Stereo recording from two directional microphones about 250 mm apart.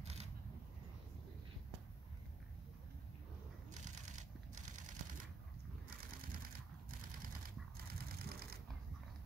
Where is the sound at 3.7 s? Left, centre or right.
Right.